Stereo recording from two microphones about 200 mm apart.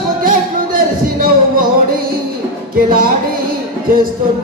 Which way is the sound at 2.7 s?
45° right (ahead or behind).